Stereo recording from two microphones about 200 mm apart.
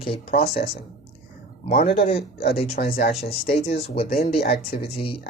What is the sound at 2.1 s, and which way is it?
Speech, 50° left (ahead or behind).